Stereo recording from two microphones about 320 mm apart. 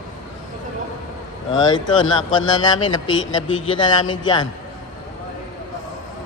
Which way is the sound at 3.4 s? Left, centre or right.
Centre.